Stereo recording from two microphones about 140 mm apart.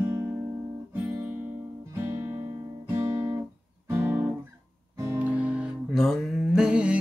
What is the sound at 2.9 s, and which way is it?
Guitar, 20° right (ahead or behind).